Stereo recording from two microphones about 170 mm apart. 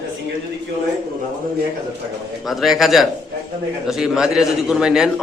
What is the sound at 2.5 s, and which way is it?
A man's voice, centre (ahead or behind).